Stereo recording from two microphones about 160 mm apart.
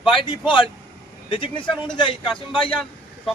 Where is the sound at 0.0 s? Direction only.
30° left (ahead or behind).